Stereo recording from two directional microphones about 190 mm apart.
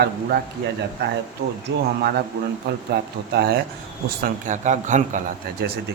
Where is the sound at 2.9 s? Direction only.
55° right (ahead or behind).